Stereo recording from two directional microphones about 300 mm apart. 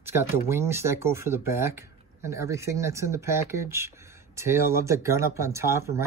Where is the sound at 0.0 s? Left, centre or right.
Centre.